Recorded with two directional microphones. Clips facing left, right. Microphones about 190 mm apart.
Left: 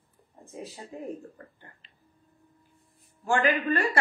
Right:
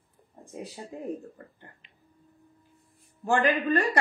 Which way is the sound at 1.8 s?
15° right (ahead or behind).